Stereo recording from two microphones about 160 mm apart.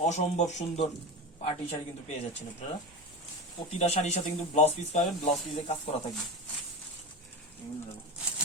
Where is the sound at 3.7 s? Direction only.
45° left (ahead or behind).